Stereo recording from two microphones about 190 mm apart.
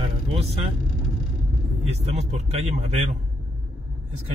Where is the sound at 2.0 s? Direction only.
35° right (ahead or behind).